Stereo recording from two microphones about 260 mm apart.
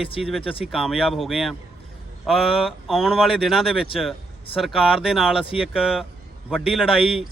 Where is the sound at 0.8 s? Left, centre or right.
Centre.